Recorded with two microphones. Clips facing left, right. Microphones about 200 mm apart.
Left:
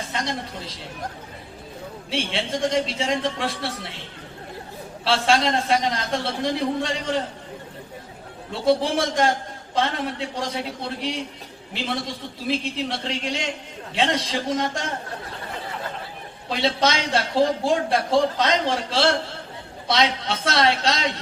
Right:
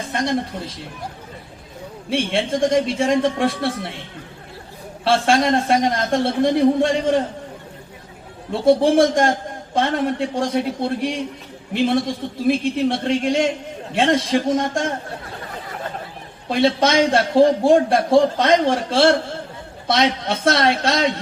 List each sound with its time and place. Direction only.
0.1 s a man's voice: 50° right (ahead or behind)
2.0 s a man's voice: 50° right (ahead or behind)
5.0 s a man's voice: 50° right (ahead or behind)
8.6 s a man's voice: 50° right (ahead or behind)
16.5 s a man's voice: 50° right (ahead or behind)